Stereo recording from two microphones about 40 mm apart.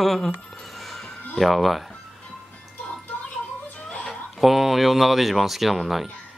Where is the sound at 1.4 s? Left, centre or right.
Centre.